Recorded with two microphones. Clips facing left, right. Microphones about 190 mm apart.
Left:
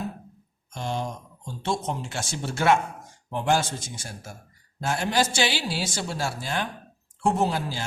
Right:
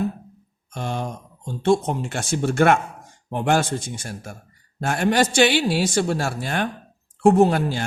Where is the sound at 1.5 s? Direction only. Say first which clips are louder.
Right 9 dB; 55° right (ahead or behind).